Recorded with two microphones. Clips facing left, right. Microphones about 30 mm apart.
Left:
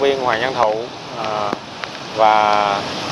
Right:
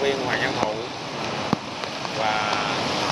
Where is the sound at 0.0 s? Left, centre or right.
Left.